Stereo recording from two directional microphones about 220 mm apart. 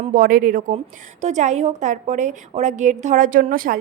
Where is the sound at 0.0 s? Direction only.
40° right (ahead or behind).